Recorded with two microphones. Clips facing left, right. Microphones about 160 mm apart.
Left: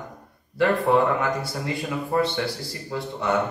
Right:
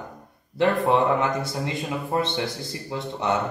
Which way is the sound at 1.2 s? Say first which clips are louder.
Right 1 dB; 20° right (ahead or behind).